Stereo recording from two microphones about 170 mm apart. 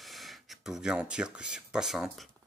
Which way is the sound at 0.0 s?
Centre (ahead or behind).